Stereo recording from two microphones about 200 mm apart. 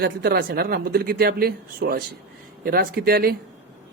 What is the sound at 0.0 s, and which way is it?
Speech, 50° right (ahead or behind).